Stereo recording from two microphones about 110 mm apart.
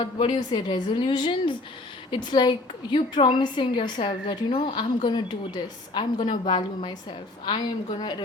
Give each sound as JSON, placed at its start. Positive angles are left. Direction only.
{"t": 0.0, "sound": "a woman's voice", "side_deg": 45}